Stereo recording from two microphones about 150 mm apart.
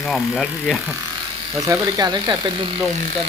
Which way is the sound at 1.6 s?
25° right (ahead or behind).